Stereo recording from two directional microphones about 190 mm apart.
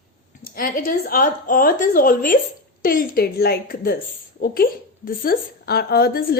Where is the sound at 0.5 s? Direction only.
45° left (ahead or behind).